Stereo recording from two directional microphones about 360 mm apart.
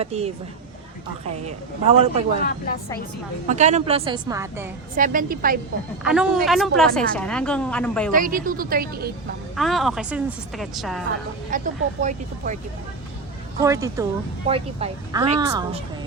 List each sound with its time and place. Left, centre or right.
0.0 s a woman's voice: centre
1.5 s a woman's voice: centre
3.4 s a woman's voice: centre
4.9 s a woman's voice: right
6.0 s a woman's voice: centre
8.1 s a woman's voice: right
9.6 s a woman's voice: centre
11.5 s a woman's voice: right
13.6 s a woman's voice: centre